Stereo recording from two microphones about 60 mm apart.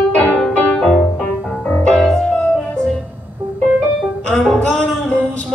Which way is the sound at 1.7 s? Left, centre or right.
Centre.